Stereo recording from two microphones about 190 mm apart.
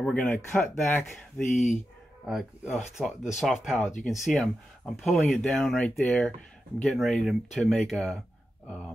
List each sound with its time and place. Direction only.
0.0 s speech: 10° left (ahead or behind)
1.5 s speech: 40° left (ahead or behind)
2.2 s speech: centre (ahead or behind)